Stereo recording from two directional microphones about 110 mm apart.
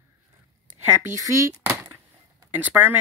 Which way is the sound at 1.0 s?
25° right (ahead or behind).